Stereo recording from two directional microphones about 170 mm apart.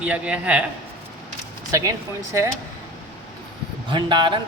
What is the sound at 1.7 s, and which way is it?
Speech, 20° right (ahead or behind).